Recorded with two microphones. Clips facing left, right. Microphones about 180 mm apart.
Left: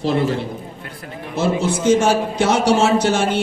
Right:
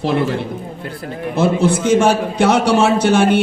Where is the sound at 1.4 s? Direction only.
60° right (ahead or behind).